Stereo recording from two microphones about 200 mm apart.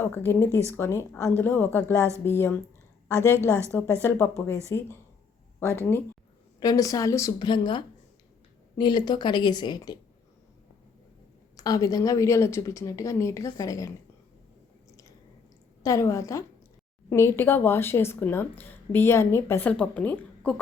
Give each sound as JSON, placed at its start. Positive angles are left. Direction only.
{"t": 0.0, "sound": "speech", "side_deg": 10}
{"t": 3.7, "sound": "speech", "side_deg": 10}
{"t": 5.5, "sound": "a woman's voice", "side_deg": 10}
{"t": 11.5, "sound": "speech", "side_deg": 20}
{"t": 15.8, "sound": "speech", "side_deg": 15}